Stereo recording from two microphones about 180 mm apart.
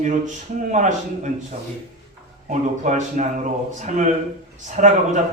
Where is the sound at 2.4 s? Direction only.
45° right (ahead or behind).